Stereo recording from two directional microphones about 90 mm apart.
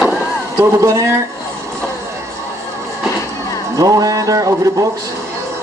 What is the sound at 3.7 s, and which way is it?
A man's voice, 40° right (ahead or behind).